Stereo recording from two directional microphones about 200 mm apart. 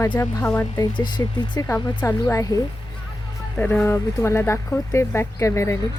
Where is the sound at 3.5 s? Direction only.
10° left (ahead or behind).